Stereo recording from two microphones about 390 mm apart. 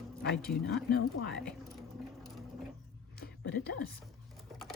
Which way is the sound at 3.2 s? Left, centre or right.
Left.